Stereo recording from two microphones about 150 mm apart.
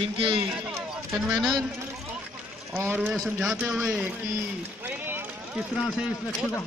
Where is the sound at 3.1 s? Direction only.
Centre (ahead or behind).